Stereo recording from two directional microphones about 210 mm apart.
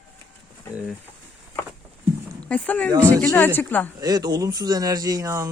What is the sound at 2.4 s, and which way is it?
Speech, 5° left (ahead or behind).